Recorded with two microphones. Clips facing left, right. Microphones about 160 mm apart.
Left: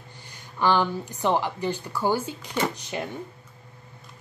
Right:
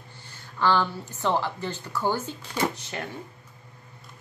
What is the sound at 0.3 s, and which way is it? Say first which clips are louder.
Speech: left 1 dB; 15° left (ahead or behind).